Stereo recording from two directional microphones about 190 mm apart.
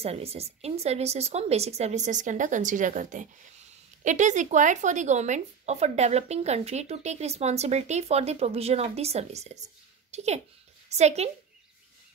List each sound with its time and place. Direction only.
0.0 s speech: 30° right (ahead or behind)